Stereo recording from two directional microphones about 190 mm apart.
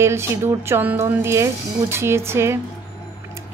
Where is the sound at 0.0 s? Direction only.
15° right (ahead or behind).